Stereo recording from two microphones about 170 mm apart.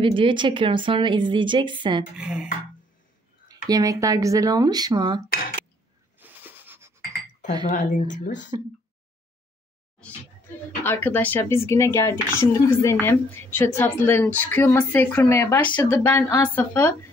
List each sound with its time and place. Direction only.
0.0 s a woman's voice: 30° right (ahead or behind)
2.1 s speech: 5° right (ahead or behind)
3.6 s a woman's voice: 20° right (ahead or behind)
6.1 s a sound: 10° right (ahead or behind)
7.7 s speech: 50° left (ahead or behind)
10.8 s a woman's voice: 10° left (ahead or behind)